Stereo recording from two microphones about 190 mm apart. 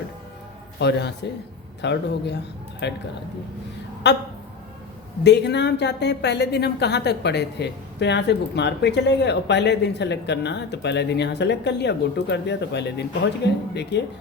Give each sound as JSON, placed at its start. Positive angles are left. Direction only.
{"t": 0.8, "sound": "speech", "side_deg": 65}
{"t": 4.0, "sound": "speech", "side_deg": 65}
{"t": 5.2, "sound": "speech", "side_deg": 65}